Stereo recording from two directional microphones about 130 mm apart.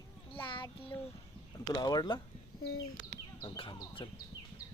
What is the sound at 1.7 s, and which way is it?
Speech, 30° left (ahead or behind).